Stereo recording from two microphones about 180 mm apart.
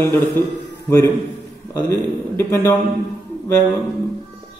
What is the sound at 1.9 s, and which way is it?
Speech, 15° left (ahead or behind).